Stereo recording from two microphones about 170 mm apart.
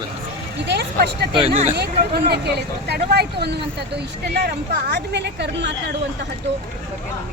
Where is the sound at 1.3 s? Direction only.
30° right (ahead or behind).